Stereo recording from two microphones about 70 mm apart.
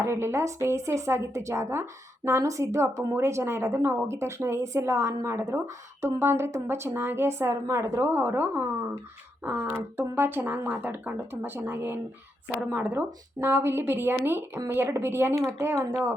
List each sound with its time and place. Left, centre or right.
0.0 s a woman's voice: right